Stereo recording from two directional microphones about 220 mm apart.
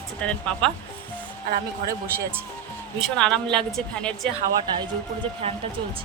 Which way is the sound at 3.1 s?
5° left (ahead or behind).